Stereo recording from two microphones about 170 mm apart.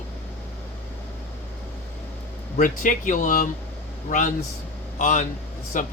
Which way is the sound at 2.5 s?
50° left (ahead or behind).